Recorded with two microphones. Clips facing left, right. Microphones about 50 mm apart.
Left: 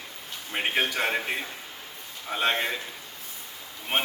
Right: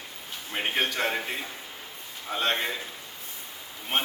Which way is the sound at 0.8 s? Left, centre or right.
Centre.